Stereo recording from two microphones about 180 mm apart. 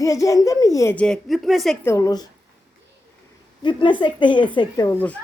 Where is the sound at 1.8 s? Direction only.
15° left (ahead or behind).